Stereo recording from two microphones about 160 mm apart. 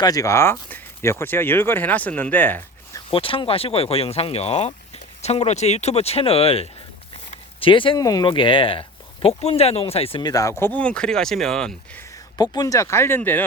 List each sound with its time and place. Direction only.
0.0 s speech: 20° left (ahead or behind)
3.1 s speech: 35° left (ahead or behind); by 12.0 s 5° left (ahead or behind)
12.1 s speech: 20° left (ahead or behind)